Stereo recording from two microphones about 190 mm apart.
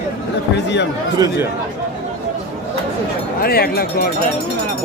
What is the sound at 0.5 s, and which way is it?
Speech, 65° left (ahead or behind).